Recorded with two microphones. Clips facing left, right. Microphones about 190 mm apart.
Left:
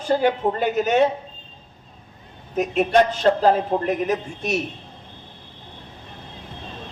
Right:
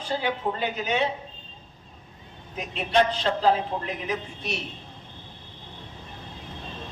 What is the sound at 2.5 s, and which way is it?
A man's voice, 50° left (ahead or behind).